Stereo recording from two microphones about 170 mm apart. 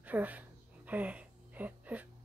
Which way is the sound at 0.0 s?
10° right (ahead or behind).